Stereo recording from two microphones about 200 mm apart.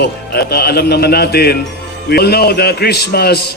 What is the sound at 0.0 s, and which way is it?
A man's voice, 55° left (ahead or behind).